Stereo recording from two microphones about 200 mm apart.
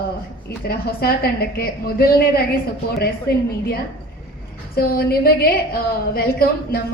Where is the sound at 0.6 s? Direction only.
50° left (ahead or behind).